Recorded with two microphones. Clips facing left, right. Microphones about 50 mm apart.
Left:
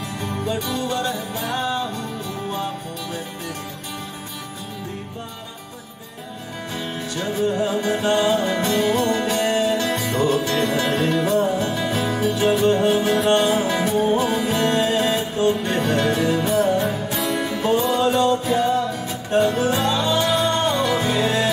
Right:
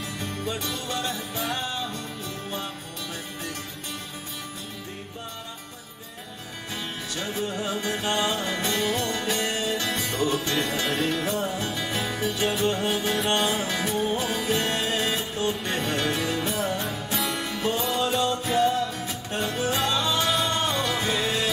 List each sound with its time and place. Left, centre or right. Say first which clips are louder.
0.2 s music: left 6 dB; centre
7.6 s music: left 7 dB; centre
9.0 s music: left 8 dB; left
9.3 s music: left 7 dB; centre
17.5 s music: left 9 dB; centre